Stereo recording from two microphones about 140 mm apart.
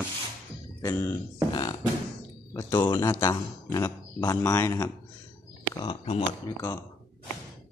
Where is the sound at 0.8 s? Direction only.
20° left (ahead or behind).